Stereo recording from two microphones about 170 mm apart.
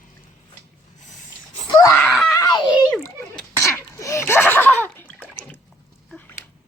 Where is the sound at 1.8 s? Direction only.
20° left (ahead or behind).